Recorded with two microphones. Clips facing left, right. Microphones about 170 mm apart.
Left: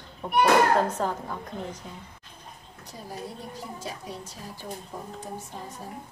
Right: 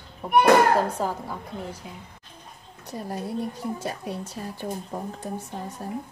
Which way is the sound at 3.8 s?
65° right (ahead or behind).